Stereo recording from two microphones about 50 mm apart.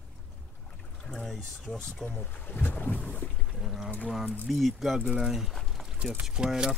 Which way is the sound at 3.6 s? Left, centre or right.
Centre.